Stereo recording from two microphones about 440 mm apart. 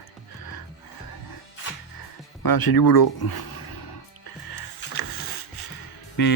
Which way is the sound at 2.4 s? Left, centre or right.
Left.